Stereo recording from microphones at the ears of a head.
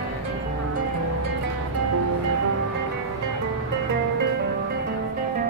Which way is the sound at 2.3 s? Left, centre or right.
Right.